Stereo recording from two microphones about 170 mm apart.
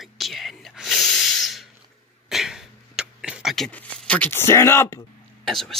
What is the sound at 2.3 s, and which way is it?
Beatboxing, centre (ahead or behind).